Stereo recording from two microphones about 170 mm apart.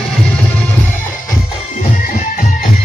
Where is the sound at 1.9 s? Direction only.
55° left (ahead or behind).